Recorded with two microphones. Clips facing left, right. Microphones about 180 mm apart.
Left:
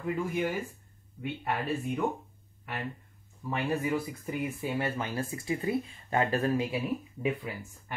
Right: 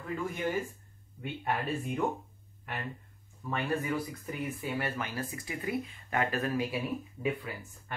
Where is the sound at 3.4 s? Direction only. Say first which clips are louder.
Left 2 dB; 20° left (ahead or behind).